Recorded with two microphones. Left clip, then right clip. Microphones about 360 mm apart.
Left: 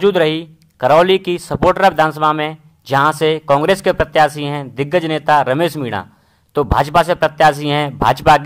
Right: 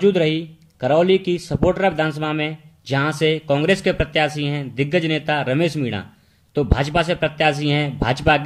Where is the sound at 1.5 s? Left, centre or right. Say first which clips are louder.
Left 7 dB; left.